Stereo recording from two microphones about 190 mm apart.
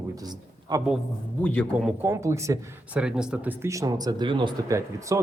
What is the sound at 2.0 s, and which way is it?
Speech, 15° right (ahead or behind).